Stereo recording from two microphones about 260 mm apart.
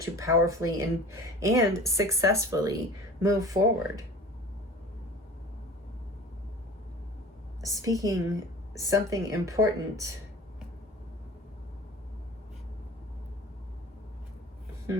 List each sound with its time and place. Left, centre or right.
0.0 s speech: centre
7.6 s speech: centre